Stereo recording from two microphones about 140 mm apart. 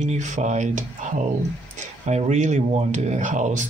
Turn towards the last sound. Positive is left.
turn(degrees=-60)  # may be behind; listen again after turning